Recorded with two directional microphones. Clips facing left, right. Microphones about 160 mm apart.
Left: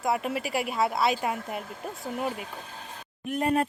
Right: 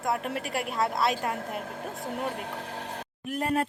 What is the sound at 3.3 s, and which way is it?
Speech, centre (ahead or behind).